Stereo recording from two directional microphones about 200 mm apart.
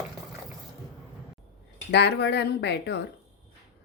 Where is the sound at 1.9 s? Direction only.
60° left (ahead or behind).